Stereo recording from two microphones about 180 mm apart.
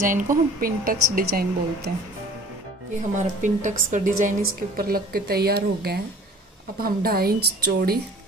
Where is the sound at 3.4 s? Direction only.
45° right (ahead or behind).